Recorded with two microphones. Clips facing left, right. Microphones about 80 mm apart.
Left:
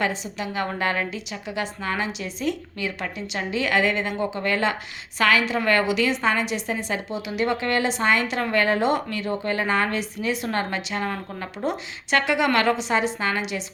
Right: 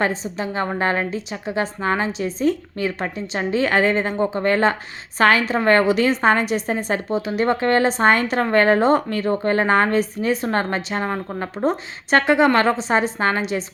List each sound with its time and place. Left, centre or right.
0.0 s a woman's voice: right